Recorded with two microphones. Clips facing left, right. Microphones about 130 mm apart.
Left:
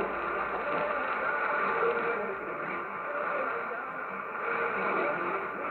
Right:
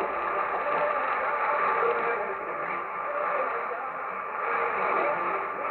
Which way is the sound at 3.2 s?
60° right (ahead or behind).